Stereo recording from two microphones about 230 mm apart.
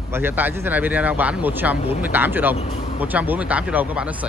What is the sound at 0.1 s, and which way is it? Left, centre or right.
A man's voice, centre.